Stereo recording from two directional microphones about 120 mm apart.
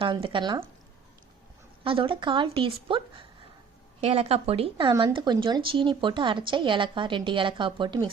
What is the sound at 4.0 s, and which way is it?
A woman's voice, 60° right (ahead or behind).